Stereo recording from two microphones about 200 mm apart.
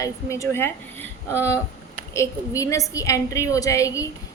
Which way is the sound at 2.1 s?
15° left (ahead or behind).